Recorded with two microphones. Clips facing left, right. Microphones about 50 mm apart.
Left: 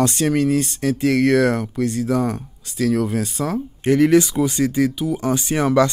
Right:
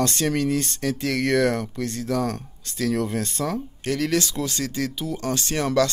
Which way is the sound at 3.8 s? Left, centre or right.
Left.